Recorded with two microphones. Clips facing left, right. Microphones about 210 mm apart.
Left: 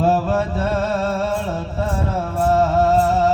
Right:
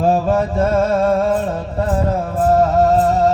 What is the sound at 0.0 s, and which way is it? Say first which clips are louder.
Music: right 3 dB; 45° right (ahead or behind).